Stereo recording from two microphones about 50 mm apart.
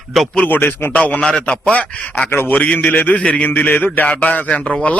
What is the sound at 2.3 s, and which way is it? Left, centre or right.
Speech, left.